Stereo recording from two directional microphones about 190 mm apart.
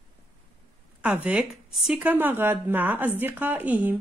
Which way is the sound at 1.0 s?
5° right (ahead or behind).